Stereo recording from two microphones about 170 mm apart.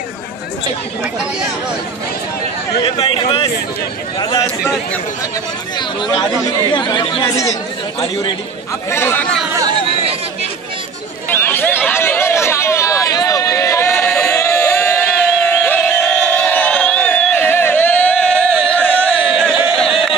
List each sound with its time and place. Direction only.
2.8 s speech: 30° left (ahead or behind)
5.8 s speech: 25° left (ahead or behind)
8.9 s speech: 15° left (ahead or behind)
9.5 s chatter: 20° right (ahead or behind)
11.2 s a sound: 10° left (ahead or behind)
19.1 s a sound: 5° right (ahead or behind)